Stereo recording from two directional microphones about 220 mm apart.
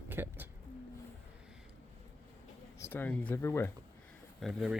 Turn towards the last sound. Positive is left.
turn(degrees=0)  # may be behind; listen again after turning